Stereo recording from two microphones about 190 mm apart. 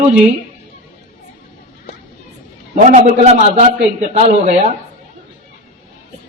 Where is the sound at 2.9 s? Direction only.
40° right (ahead or behind).